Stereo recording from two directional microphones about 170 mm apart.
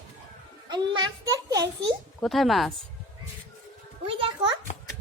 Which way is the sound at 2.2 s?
Centre (ahead or behind).